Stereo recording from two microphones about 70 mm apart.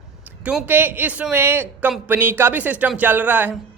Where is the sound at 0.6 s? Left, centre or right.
Right.